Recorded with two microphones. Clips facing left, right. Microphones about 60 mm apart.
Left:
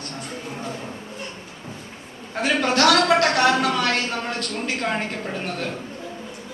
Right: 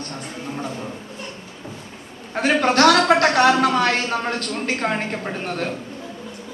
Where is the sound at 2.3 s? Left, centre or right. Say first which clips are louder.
Right 3 dB; right.